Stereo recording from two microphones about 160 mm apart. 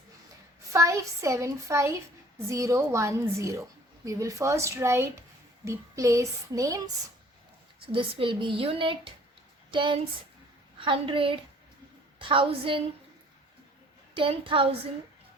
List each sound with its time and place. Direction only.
0.7 s a woman's voice: 20° right (ahead or behind)
7.9 s a woman's voice: 35° right (ahead or behind)
14.2 s a woman's voice: 35° right (ahead or behind)